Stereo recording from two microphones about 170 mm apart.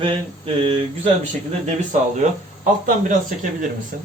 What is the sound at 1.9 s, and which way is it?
Speech, 45° right (ahead or behind).